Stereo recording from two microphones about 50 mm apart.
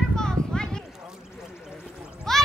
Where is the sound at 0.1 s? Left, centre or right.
Centre.